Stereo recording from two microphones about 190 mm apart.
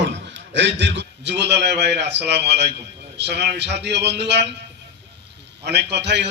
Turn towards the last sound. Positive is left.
turn(degrees=-65)  # may be behind; listen again after turning